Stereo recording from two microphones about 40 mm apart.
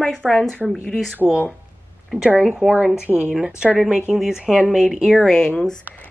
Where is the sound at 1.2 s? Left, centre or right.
Centre.